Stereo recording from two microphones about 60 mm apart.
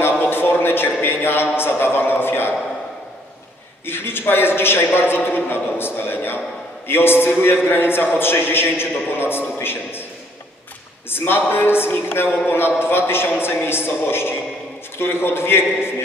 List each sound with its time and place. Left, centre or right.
0.0 s a sound: left
3.8 s a man's voice: left
11.1 s a man's voice: left